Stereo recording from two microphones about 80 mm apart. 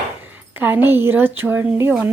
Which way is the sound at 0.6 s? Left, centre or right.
Right.